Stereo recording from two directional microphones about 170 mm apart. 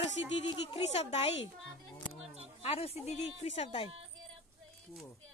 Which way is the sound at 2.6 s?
35° left (ahead or behind).